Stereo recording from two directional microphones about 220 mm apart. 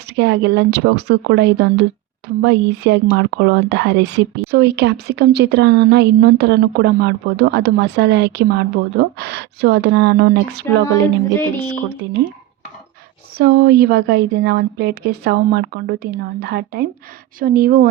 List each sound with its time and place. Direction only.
0.2 s speech: 50° right (ahead or behind)
13.3 s speech: 45° right (ahead or behind)